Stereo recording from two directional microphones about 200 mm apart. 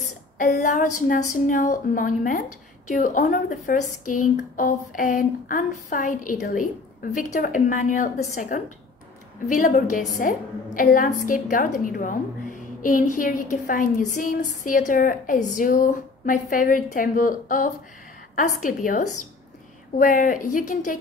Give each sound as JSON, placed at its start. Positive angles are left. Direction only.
{"t": 0.4, "sound": "a woman's voice", "side_deg": 40}